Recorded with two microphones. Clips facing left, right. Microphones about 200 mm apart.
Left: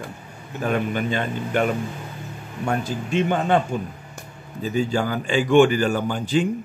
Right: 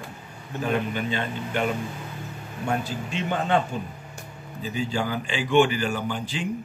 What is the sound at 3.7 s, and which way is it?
Speech, 50° left (ahead or behind).